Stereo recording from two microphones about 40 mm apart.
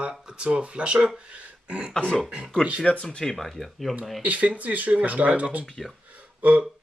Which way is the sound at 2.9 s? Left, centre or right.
Left.